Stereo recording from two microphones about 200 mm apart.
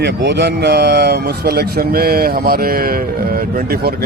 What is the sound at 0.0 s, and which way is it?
Speech, 60° right (ahead or behind).